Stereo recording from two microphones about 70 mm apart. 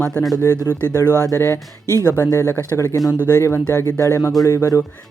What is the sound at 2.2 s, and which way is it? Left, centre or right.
Speech, left.